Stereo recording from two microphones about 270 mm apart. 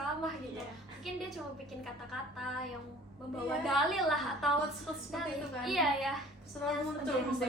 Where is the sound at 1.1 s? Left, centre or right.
Centre.